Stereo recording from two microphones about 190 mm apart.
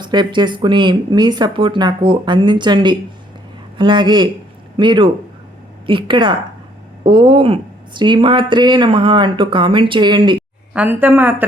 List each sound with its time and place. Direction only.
0.0 s speech: 25° right (ahead or behind)
10.8 s speech: 10° right (ahead or behind)